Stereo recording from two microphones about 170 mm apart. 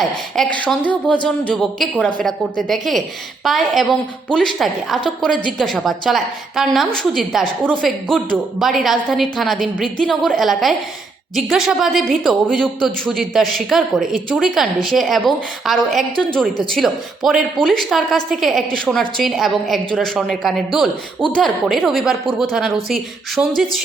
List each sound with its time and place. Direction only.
0.0 s a woman's voice: 5° left (ahead or behind)